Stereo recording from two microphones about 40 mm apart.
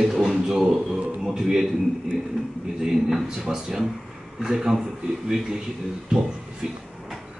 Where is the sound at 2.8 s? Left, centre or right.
Centre.